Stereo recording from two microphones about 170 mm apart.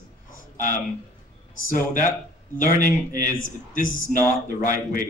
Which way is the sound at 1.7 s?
50° left (ahead or behind).